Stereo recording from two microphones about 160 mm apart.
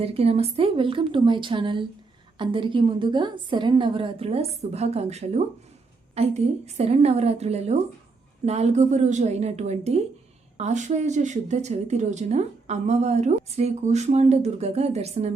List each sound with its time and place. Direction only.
0.0 s a woman's voice: 40° right (ahead or behind)